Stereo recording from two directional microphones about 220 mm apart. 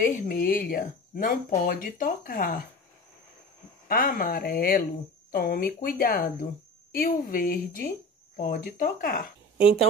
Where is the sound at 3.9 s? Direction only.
40° left (ahead or behind).